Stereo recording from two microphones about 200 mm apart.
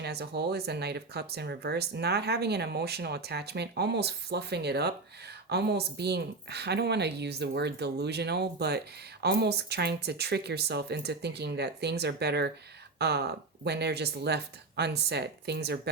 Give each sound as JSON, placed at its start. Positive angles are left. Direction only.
{"t": 0.0, "sound": "speech", "side_deg": -55}